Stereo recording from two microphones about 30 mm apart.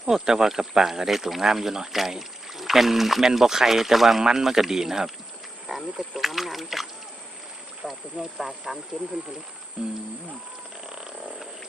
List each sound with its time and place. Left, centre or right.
0.0 s speech: centre
8.2 s speech: centre
9.8 s music: right
10.8 s frog: right